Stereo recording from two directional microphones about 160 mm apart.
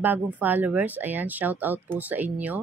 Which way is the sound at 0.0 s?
10° right (ahead or behind).